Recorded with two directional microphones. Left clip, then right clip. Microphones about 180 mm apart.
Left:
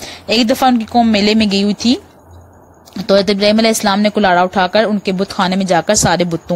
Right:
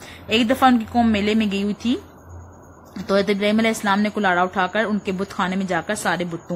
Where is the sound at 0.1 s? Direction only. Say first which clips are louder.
Left 6 dB; 50° left (ahead or behind).